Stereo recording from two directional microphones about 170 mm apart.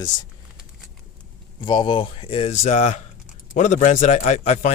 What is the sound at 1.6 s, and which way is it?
A man's voice, 25° left (ahead or behind).